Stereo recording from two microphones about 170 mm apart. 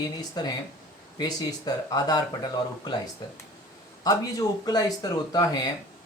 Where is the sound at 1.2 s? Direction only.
20° left (ahead or behind).